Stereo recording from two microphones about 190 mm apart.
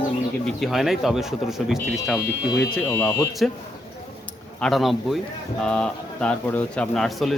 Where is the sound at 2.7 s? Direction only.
10° left (ahead or behind).